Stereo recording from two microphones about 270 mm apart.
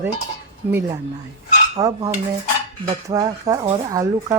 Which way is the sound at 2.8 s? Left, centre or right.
Centre.